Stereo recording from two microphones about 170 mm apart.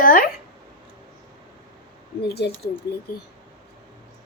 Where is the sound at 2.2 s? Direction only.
70° left (ahead or behind).